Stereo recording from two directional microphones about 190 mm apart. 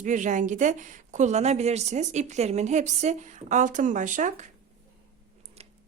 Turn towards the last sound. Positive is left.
turn(degrees=-30)  # may be behind; listen again after turning